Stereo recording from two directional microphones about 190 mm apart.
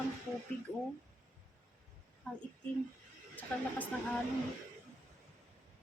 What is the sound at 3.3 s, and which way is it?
Speech, 10° left (ahead or behind).